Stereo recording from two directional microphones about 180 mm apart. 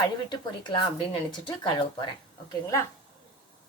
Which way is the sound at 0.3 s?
25° left (ahead or behind).